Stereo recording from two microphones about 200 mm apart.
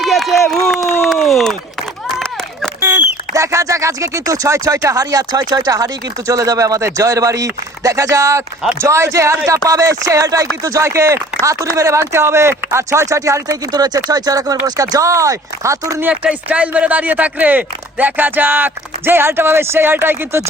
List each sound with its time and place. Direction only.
0.0 s run: centre (ahead or behind)
0.4 s speech: centre (ahead or behind)
2.8 s speech: 15° right (ahead or behind)